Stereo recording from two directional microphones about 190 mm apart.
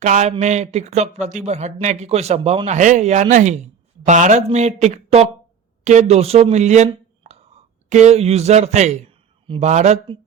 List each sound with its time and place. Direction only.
0.0 s speech: 40° right (ahead or behind)